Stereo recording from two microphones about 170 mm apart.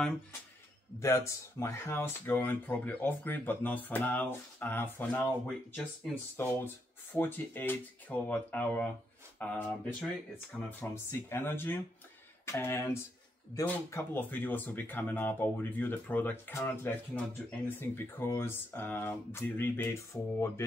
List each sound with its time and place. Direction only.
0.9 s speech: 15° left (ahead or behind)
6.3 s speech: 15° left (ahead or behind)